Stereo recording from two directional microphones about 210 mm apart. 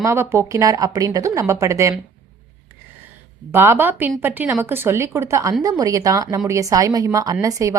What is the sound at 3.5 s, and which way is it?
A woman's voice, 10° right (ahead or behind).